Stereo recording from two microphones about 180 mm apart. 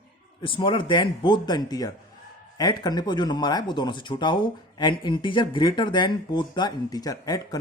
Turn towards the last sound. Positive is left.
turn(degrees=20)  # may be behind; listen again after turning